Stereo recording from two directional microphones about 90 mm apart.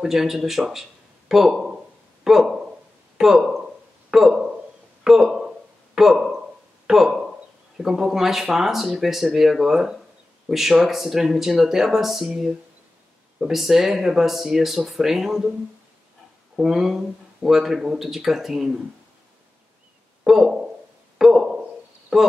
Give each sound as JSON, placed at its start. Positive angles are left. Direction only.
{"t": 0.0, "sound": "speech", "side_deg": -5}
{"t": 5.0, "sound": "a sound", "side_deg": -5}
{"t": 7.7, "sound": "speech", "side_deg": -5}
{"t": 16.5, "sound": "speech", "side_deg": -5}
{"t": 20.2, "sound": "a sound", "side_deg": -5}
{"t": 22.1, "sound": "speech", "side_deg": -5}